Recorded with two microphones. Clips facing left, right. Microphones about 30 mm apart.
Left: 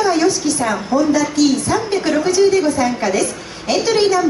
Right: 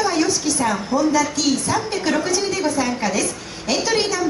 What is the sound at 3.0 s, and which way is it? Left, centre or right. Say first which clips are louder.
Speech: left 4 dB; left.